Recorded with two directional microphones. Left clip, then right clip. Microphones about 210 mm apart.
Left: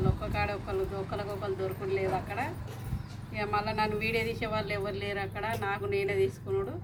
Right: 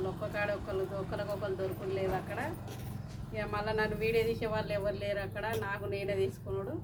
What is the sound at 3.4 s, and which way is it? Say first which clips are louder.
A woman's voice: left 3 dB; 15° right (ahead or behind).